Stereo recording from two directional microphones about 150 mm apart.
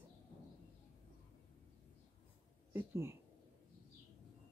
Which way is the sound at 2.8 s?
15° right (ahead or behind).